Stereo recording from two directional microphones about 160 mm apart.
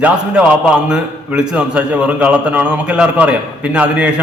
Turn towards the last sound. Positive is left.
turn(degrees=-10)  # may be behind; listen again after turning